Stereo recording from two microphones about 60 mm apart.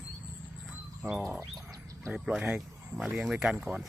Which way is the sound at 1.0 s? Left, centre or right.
Right.